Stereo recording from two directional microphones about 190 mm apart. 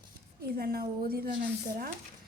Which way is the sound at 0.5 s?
55° right (ahead or behind).